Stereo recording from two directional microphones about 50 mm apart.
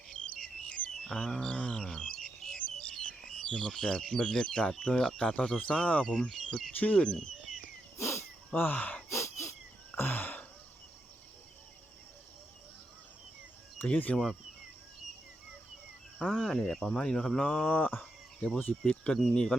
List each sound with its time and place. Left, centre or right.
0.3 s bird: left
0.9 s wild animals: centre
1.8 s bird: centre
3.2 s speech: centre
7.9 s wild animals: left
8.5 s speech: left
9.0 s a sound: left
9.9 s a sound: left
13.9 s speech: left
16.2 s speech: centre
17.7 s speech: left
18.3 s speech: centre